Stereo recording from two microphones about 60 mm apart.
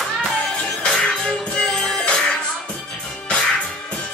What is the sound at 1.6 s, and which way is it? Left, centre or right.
Music, centre.